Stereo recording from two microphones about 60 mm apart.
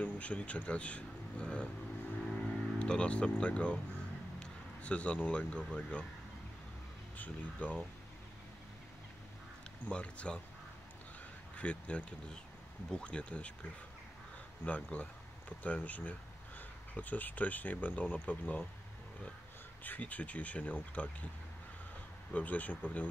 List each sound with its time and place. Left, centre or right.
0.0 s speech: left
7.2 s speech: left
9.8 s speech: centre
11.5 s speech: centre
14.6 s speech: left
19.8 s speech: left
22.3 s speech: left